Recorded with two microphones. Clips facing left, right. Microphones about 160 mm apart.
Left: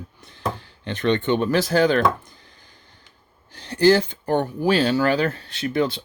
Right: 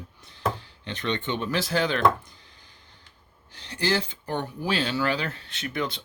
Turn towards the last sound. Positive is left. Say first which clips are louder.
# left 8 dB
turn(degrees=35)  # may be behind; listen again after turning